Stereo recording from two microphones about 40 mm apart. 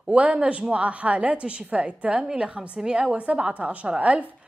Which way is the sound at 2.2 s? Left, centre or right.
Centre.